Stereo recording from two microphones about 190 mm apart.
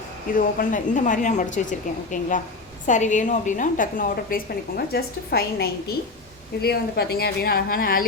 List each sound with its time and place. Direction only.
0.3 s a woman's voice: 45° left (ahead or behind)